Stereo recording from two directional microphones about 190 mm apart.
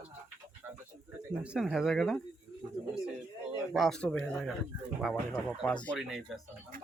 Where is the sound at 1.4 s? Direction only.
5° right (ahead or behind).